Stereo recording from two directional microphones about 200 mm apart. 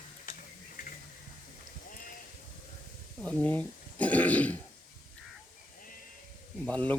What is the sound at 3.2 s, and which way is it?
Speech, 5° left (ahead or behind).